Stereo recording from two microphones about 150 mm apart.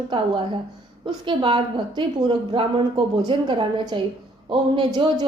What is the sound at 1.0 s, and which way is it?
Speech, 35° right (ahead or behind).